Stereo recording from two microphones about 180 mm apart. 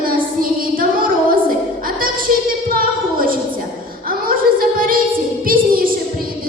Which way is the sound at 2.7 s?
55° right (ahead or behind).